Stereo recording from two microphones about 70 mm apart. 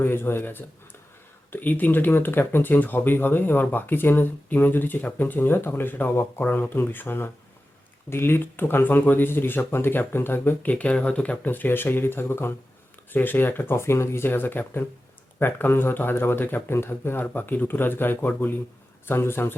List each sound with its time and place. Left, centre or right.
0.0 s speech: left